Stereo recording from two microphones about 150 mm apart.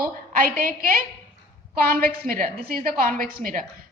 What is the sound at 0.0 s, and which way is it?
A woman's voice, 70° right (ahead or behind).